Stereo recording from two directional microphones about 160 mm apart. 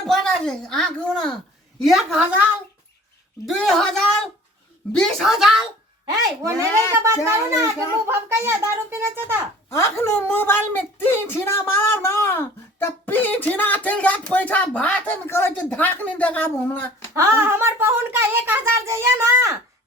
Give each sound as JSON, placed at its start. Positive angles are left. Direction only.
{"t": 0.1, "sound": "a woman's voice", "side_deg": 5}
{"t": 6.4, "sound": "a child's voice", "side_deg": -20}
{"t": 9.6, "sound": "speech", "side_deg": 15}
{"t": 17.2, "sound": "speech", "side_deg": -15}